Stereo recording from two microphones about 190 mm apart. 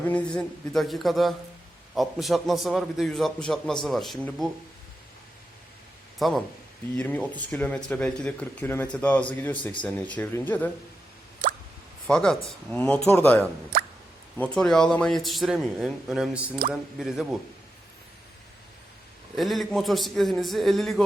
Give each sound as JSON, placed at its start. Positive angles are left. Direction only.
{"t": 0.1, "sound": "a man's voice", "side_deg": 5}
{"t": 6.1, "sound": "speech", "side_deg": 0}
{"t": 12.0, "sound": "a man's voice", "side_deg": 5}
{"t": 13.7, "sound": "plop", "side_deg": -50}
{"t": 14.3, "sound": "a man's voice", "side_deg": 5}
{"t": 19.4, "sound": "a man's voice", "side_deg": 0}